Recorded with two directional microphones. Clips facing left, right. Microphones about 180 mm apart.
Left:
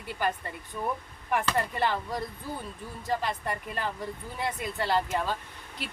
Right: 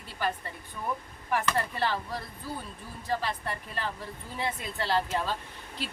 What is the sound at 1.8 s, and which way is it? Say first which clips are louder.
Speech: left 2 dB; 20° left (ahead or behind).